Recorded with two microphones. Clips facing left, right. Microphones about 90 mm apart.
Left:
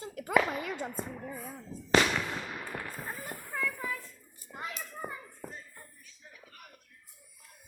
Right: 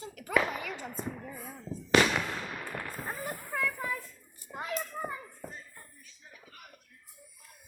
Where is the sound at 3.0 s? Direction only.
20° right (ahead or behind).